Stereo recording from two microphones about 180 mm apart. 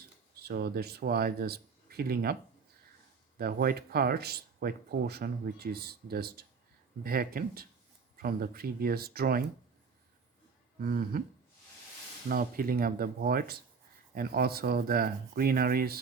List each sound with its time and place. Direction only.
0.4 s speech: 60° right (ahead or behind)
3.3 s speech: 55° right (ahead or behind)
10.8 s speech: 55° right (ahead or behind)
12.3 s speech: 55° right (ahead or behind)